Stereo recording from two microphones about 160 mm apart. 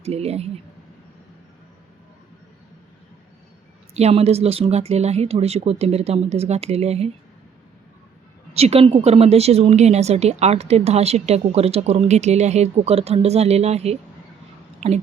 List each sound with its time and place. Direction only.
0.0 s a woman's voice: 40° right (ahead or behind)
3.9 s a woman's voice: 40° right (ahead or behind)
8.5 s a woman's voice: 40° right (ahead or behind)